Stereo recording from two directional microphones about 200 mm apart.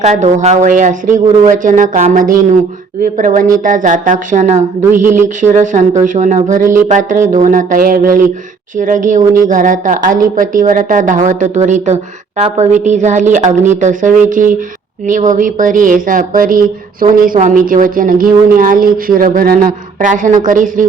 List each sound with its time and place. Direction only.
0.0 s a woman's voice: 35° right (ahead or behind)
4.8 s speech: 10° right (ahead or behind)
5.4 s a woman's voice: 35° right (ahead or behind)